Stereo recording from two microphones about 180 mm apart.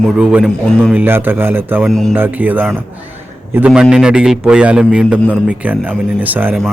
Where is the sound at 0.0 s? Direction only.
5° right (ahead or behind).